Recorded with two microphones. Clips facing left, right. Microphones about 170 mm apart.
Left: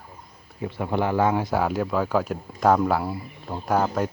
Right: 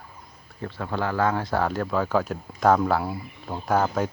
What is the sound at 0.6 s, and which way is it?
Speech, 15° left (ahead or behind).